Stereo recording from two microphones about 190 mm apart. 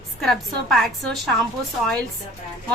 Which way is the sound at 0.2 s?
Centre (ahead or behind).